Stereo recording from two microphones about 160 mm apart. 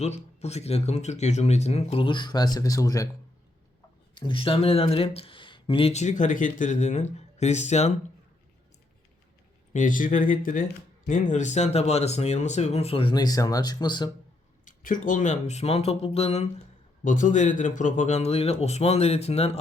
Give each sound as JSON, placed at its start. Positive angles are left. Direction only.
{"t": 0.0, "sound": "speech", "side_deg": 45}
{"t": 4.1, "sound": "speech", "side_deg": 35}
{"t": 9.7, "sound": "speech", "side_deg": 55}
{"t": 14.6, "sound": "speech", "side_deg": 55}
{"t": 17.0, "sound": "speech", "side_deg": 55}